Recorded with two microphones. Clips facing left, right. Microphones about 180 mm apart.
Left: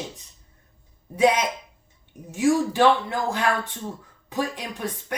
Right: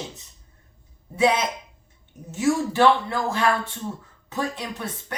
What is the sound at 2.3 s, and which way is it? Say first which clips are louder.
A man's voice: left 1 dB; 15° left (ahead or behind).